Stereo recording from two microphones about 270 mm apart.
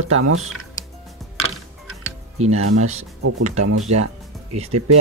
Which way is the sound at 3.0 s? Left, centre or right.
Right.